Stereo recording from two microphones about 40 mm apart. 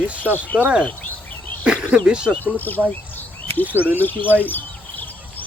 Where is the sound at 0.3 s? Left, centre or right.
Right.